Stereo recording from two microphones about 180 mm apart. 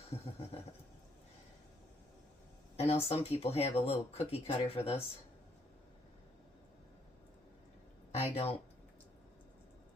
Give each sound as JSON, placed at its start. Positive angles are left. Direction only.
{"t": 0.1, "sound": "vehicle", "side_deg": 30}
{"t": 2.7, "sound": "speech", "side_deg": 35}
{"t": 8.1, "sound": "speech", "side_deg": 35}